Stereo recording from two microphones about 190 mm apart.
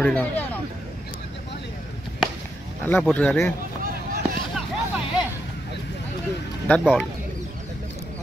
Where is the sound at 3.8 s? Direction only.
50° right (ahead or behind).